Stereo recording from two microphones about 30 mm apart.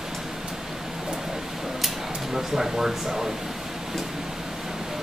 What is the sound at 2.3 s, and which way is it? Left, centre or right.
Speech, centre.